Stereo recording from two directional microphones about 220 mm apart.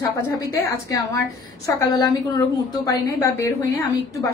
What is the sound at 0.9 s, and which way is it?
A woman's voice, 15° left (ahead or behind).